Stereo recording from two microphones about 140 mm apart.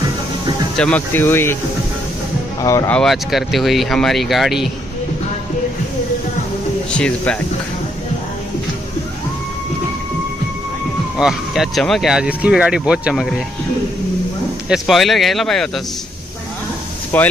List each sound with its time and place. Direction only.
0.7 s speech: 10° left (ahead or behind)
2.6 s speech: 25° left (ahead or behind)
2.9 s speech: 5° left (ahead or behind)
7.0 s speech: 10° left (ahead or behind)
11.1 s speech: 5° right (ahead or behind)
14.7 s speech: centre (ahead or behind)
17.1 s speech: 15° left (ahead or behind)